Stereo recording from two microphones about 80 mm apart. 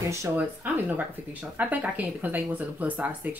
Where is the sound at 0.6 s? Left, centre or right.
Right.